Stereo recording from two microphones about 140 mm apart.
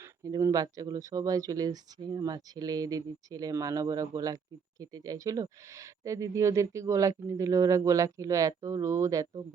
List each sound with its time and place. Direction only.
0.0 s speech: 25° right (ahead or behind)